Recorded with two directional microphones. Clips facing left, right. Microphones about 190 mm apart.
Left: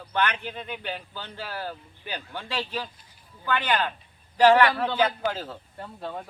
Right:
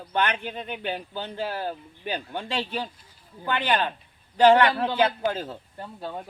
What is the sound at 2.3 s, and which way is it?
Speech, 25° right (ahead or behind).